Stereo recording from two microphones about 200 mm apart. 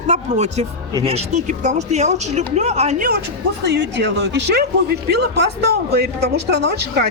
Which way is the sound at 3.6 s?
60° right (ahead or behind).